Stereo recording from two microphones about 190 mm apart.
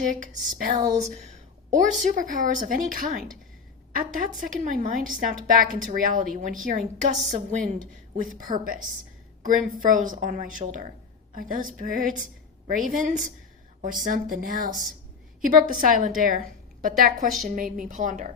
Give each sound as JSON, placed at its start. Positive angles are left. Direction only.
{"t": 0.6, "sound": "a woman's voice", "side_deg": -45}
{"t": 9.8, "sound": "a woman's voice", "side_deg": -45}